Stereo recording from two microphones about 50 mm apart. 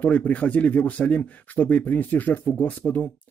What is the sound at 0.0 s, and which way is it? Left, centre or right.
Speech, left.